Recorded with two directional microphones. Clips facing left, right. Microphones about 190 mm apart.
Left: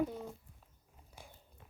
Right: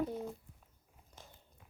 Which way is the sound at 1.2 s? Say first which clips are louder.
Left 2 dB; 10° left (ahead or behind).